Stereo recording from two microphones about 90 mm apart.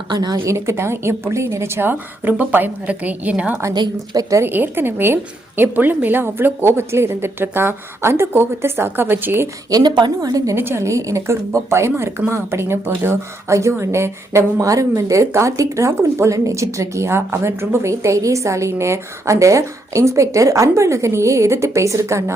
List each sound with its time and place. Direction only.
0.1 s speech: 50° right (ahead or behind)
0.4 s a woman's voice: 30° right (ahead or behind); by 3.6 s 15° right (ahead or behind)
3.8 s speech: 45° right (ahead or behind)
4.4 s a woman's voice: 25° right (ahead or behind)
9.6 s speech: 45° right (ahead or behind)
10.5 s a woman's voice: 25° right (ahead or behind)